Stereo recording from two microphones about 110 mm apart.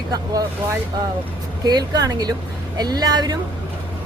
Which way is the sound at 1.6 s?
35° right (ahead or behind).